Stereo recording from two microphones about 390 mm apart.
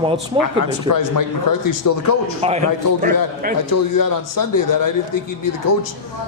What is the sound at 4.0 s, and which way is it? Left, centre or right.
Speech, left.